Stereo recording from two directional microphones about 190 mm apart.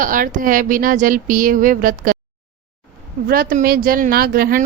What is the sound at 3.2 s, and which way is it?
Speech, 50° right (ahead or behind).